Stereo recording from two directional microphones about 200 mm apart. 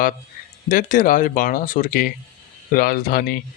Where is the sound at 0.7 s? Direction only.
40° left (ahead or behind).